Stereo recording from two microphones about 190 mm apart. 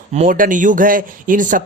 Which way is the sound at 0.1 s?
40° right (ahead or behind).